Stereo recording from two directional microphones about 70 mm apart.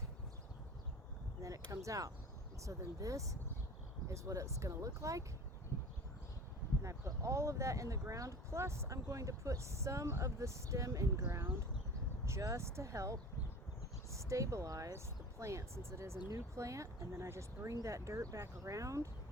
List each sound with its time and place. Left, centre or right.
1.4 s a sound: right
2.6 s speech: right
6.8 s speech: right
11.3 s speech: right